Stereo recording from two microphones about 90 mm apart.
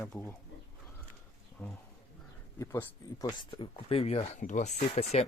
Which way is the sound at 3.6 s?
80° left.